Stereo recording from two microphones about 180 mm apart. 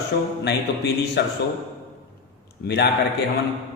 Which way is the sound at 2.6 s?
65° left (ahead or behind).